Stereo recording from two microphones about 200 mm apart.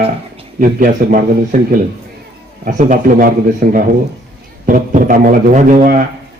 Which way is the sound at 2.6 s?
45° right (ahead or behind).